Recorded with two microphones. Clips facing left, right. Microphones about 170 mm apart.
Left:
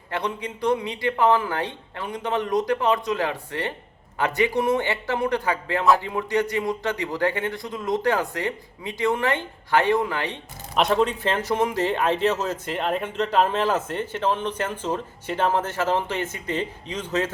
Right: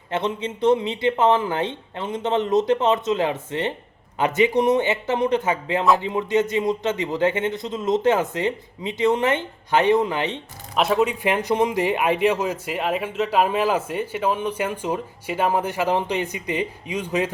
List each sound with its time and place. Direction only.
0.1 s a man's voice: 20° right (ahead or behind)
10.8 s speech: 5° right (ahead or behind)